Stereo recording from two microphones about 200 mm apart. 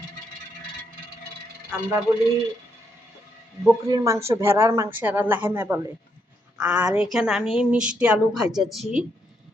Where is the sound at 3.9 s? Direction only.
15° right (ahead or behind).